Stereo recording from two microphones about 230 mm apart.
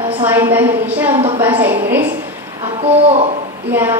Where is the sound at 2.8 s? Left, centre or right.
Right.